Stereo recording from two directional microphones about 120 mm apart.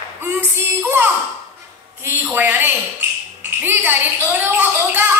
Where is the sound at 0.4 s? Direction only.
15° right (ahead or behind).